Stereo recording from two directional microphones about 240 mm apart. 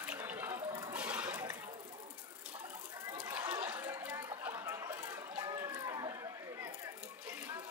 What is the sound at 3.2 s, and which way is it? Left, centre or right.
Chatter, centre.